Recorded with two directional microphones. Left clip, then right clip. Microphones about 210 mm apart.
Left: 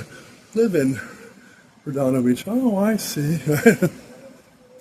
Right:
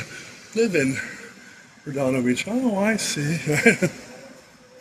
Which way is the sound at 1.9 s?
40° left (ahead or behind).